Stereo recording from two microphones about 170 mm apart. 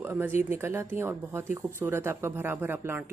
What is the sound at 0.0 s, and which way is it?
Speech, 10° right (ahead or behind).